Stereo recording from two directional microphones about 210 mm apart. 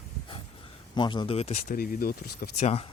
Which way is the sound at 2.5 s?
30° left (ahead or behind).